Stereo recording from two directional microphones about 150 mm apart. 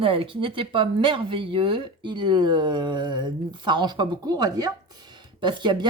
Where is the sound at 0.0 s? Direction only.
35° right (ahead or behind).